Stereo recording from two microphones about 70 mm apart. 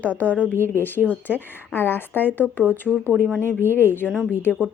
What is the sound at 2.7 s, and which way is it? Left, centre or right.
Speech, right.